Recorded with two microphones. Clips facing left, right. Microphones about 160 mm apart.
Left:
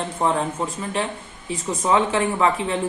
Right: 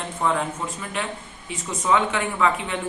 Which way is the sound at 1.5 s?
35° left (ahead or behind).